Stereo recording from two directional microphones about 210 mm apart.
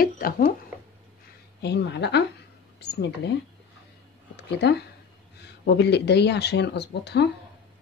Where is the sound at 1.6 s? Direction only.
55° left (ahead or behind).